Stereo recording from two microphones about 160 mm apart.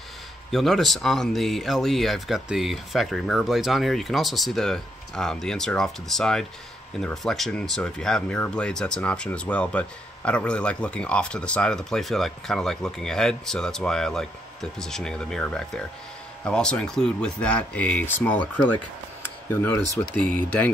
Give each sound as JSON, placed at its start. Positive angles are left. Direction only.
{"t": 0.5, "sound": "speech", "side_deg": 0}
{"t": 19.5, "sound": "speech", "side_deg": 10}